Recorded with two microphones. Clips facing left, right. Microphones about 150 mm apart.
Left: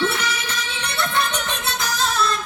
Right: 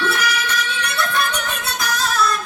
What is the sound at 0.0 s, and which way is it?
Music, 25° left (ahead or behind).